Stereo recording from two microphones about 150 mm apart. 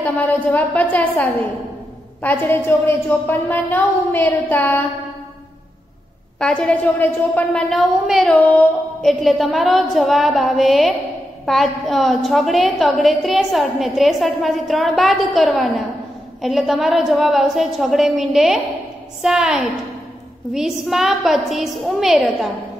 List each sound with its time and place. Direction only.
0.0 s a woman's voice: 10° left (ahead or behind)
6.4 s a woman's voice: 5° left (ahead or behind)